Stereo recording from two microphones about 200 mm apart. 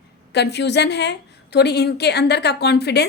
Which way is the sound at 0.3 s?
55° left (ahead or behind).